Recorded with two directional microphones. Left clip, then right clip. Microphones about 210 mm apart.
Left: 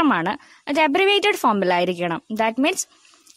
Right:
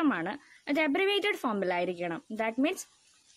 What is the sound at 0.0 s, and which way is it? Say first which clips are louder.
Speech: left 11 dB; 45° left (ahead or behind).